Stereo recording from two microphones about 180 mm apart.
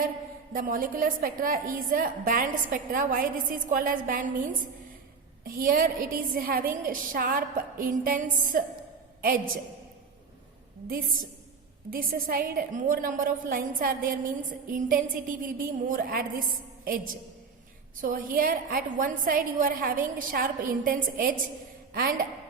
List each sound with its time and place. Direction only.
0.5 s a woman's voice: 50° right (ahead or behind)
5.5 s a woman's voice: 50° right (ahead or behind)
10.8 s a woman's voice: 50° right (ahead or behind)